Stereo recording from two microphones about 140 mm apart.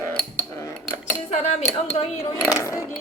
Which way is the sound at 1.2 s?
55° left (ahead or behind).